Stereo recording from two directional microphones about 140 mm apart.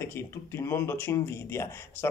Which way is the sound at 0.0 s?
20° left (ahead or behind).